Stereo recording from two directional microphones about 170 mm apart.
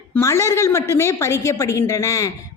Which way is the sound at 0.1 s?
15° left (ahead or behind).